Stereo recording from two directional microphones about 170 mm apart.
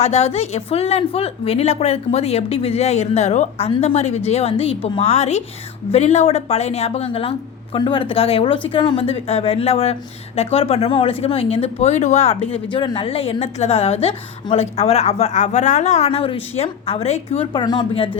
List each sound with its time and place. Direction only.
0.0 s a woman's voice: 40° left (ahead or behind)
12.7 s a woman's voice: 25° left (ahead or behind)